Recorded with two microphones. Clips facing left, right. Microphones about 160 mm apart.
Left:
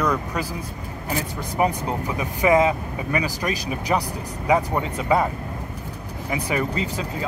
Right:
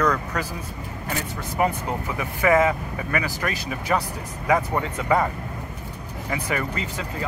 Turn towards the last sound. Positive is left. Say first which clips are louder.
# left 3 dB
turn(degrees=15)  # may be behind; listen again after turning